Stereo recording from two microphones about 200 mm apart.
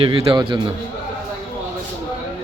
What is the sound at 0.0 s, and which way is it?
Speech, 25° right (ahead or behind).